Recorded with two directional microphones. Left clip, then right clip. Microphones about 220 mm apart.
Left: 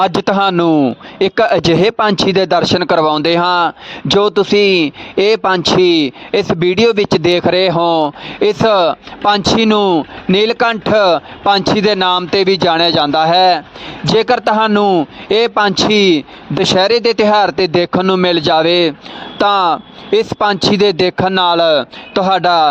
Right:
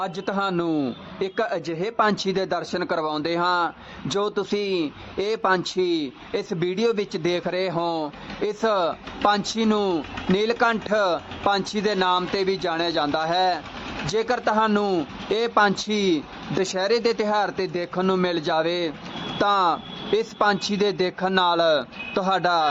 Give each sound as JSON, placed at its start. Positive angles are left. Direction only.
{"t": 0.0, "sound": "a man's voice", "side_deg": 40}
{"t": 0.7, "sound": "speech", "side_deg": 20}
{"t": 1.2, "sound": "a man's voice", "side_deg": 40}